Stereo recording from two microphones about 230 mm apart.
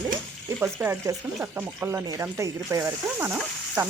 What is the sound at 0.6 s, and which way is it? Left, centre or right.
Speech, centre.